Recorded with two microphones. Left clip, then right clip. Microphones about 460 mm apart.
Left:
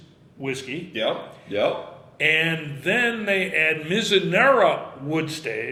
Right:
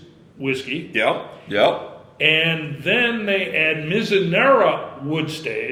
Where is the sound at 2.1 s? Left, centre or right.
Centre.